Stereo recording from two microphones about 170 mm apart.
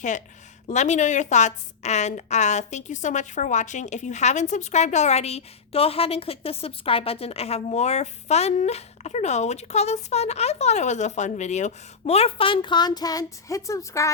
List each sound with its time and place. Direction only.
0.7 s a woman's voice: 45° left (ahead or behind); by 14.1 s 20° left (ahead or behind)